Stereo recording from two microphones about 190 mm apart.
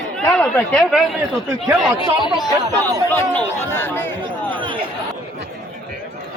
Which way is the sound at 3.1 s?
10° left (ahead or behind).